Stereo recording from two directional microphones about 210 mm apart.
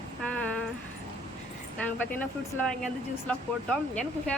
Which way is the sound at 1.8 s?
10° left (ahead or behind).